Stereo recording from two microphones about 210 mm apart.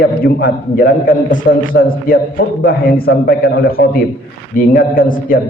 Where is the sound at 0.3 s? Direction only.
50° left (ahead or behind).